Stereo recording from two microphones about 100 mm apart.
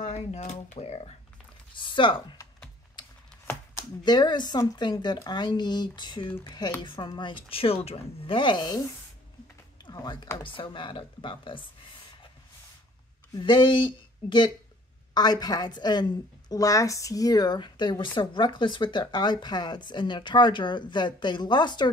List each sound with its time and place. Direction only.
0.3 s speech: 85° left
1.8 s a woman's voice: 55° left (ahead or behind)
4.0 s a woman's voice: 45° left (ahead or behind)
9.8 s a sound: 45° left (ahead or behind)
10.3 s a woman's voice: 55° left (ahead or behind)
13.4 s a woman's voice: 55° left (ahead or behind)